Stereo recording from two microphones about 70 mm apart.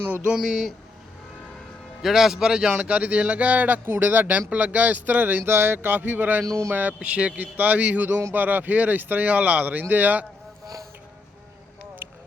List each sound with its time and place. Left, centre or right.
0.3 s a man's voice: centre
2.0 s a man's voice: centre; by 10.2 s right
12.0 s a sound: right